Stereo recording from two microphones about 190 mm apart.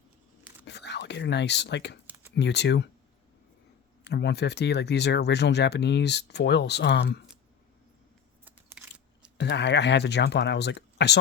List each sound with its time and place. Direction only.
0.6 s speech: 65° left (ahead or behind)
4.0 s speech: 60° left (ahead or behind)
8.4 s a sound: 5° right (ahead or behind)
9.4 s speech: 65° left (ahead or behind)